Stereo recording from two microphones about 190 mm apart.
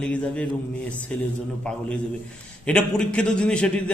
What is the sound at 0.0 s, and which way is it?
A man's voice, 5° left (ahead or behind).